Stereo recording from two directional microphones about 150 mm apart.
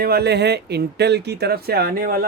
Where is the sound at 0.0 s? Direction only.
90° right.